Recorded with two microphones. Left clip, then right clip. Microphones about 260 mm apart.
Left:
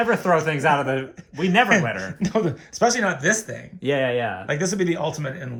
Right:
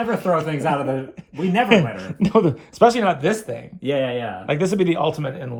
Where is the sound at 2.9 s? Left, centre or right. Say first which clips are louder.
Right 2 dB; right.